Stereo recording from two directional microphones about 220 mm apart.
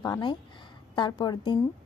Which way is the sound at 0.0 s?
20° left (ahead or behind).